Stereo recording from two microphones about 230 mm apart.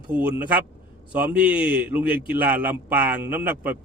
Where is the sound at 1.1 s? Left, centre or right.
Centre.